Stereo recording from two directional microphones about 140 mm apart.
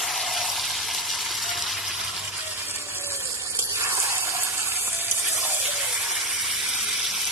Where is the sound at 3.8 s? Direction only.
15° right (ahead or behind).